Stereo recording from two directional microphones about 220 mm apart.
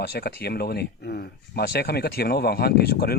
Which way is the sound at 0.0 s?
45° left (ahead or behind).